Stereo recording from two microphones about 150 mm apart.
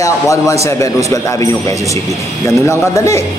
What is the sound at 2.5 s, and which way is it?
Speech, 20° left (ahead or behind).